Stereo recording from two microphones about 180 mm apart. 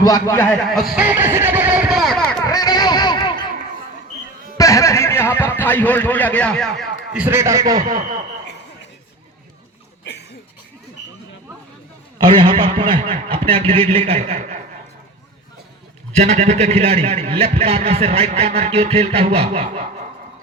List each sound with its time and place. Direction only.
0.0 s a man's voice: 20° left (ahead or behind)
0.9 s vehicle: 10° right (ahead or behind)
2.5 s a sound: 20° left (ahead or behind)
4.5 s speech: 20° left (ahead or behind); by 7.8 s 20° right (ahead or behind)
7.8 s a man's voice: 45° right (ahead or behind)
10.0 s a sound: 70° left (ahead or behind)
12.2 s a man's voice: 25° right (ahead or behind)
14.2 s a man's voice: 45° right (ahead or behind)
16.1 s a man's voice: 40° right (ahead or behind)